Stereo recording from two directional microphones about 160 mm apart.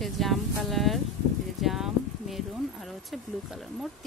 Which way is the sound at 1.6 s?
Centre (ahead or behind).